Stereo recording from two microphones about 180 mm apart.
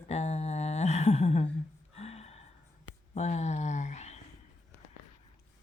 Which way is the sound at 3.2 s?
40° left (ahead or behind).